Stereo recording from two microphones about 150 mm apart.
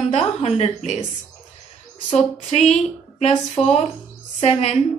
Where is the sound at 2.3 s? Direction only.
50° left (ahead or behind).